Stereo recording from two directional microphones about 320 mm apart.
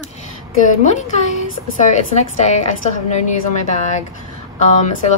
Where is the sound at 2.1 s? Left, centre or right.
Left.